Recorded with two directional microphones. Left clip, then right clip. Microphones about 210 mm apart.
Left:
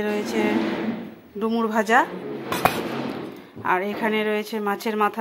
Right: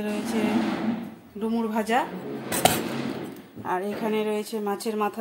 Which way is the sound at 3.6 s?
10° left (ahead or behind).